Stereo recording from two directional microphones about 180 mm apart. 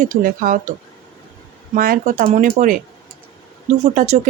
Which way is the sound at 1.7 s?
50° right (ahead or behind).